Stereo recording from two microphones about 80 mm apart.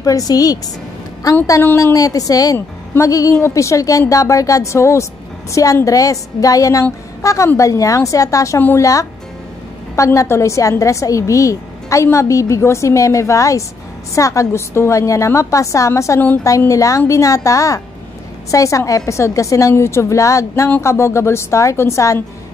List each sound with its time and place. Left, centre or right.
0.0 s a woman's voice: left
8.5 s a woman's voice: left
9.9 s a woman's voice: left